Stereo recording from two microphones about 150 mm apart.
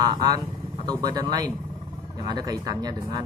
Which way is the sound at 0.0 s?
25° right (ahead or behind).